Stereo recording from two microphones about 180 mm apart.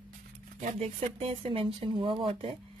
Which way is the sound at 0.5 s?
40° right (ahead or behind).